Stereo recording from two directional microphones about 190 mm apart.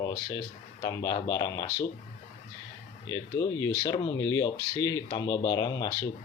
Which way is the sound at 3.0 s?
20° left (ahead or behind).